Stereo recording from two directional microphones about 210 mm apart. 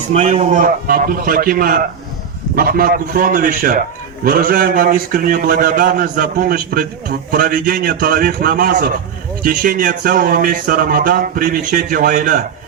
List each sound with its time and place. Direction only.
0.1 s a man's voice: 30° right (ahead or behind)